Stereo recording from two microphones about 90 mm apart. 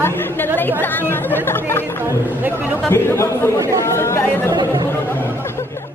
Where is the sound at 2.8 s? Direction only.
25° left (ahead or behind).